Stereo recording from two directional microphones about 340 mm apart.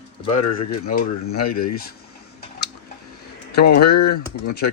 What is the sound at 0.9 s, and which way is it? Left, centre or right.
Speech, left.